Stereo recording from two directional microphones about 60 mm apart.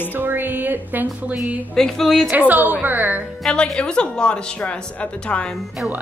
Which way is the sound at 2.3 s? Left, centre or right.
Right.